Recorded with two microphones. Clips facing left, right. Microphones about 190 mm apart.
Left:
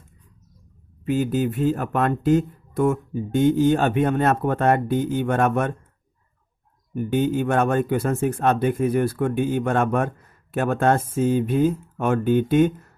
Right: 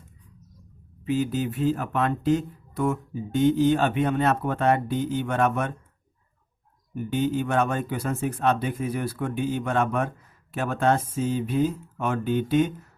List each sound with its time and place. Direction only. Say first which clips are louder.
1.0 s speech: left 3 dB; 50° left (ahead or behind)
6.9 s speech: left 4 dB; 50° left (ahead or behind)